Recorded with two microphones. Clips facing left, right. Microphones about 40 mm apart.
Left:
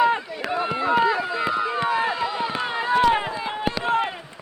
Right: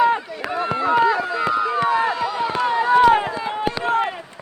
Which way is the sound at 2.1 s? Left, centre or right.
Left.